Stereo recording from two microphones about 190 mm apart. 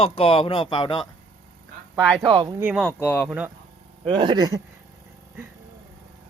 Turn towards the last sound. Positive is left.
turn(degrees=-20)  # may be behind; listen again after turning